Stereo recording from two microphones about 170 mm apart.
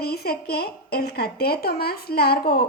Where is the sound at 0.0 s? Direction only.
65° left (ahead or behind).